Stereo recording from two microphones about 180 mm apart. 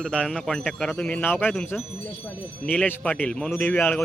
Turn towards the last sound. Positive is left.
turn(degrees=10)  # may be behind; listen again after turning